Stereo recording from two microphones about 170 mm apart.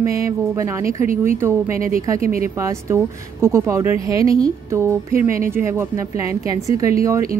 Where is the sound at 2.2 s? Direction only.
55° right (ahead or behind).